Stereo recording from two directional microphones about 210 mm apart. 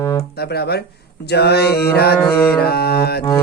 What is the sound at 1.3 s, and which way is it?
Mantra, 50° left (ahead or behind).